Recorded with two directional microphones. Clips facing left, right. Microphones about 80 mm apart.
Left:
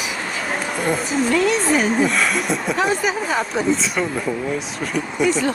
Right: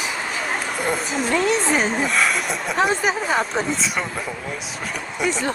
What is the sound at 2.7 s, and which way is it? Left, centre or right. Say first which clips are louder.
Speech: right 3 dB; right.